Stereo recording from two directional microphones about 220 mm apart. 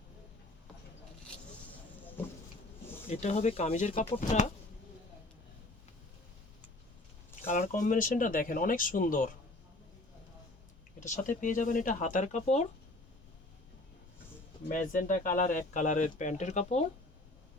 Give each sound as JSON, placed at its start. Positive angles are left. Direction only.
{"t": 2.2, "sound": "a sound", "side_deg": 10}
{"t": 3.1, "sound": "speech", "side_deg": 30}
{"t": 7.4, "sound": "speech", "side_deg": 35}
{"t": 11.0, "sound": "speech", "side_deg": 35}
{"t": 14.7, "sound": "speech", "side_deg": 35}